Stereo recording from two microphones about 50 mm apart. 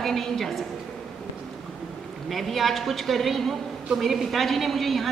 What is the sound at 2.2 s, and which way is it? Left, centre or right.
A woman's voice, centre.